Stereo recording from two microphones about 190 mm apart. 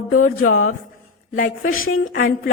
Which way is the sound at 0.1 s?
90° left.